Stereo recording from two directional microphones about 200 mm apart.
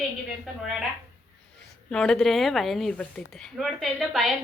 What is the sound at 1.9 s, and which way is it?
Speech, 5° left (ahead or behind).